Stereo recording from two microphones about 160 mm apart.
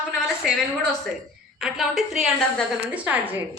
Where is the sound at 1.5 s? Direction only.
Centre (ahead or behind).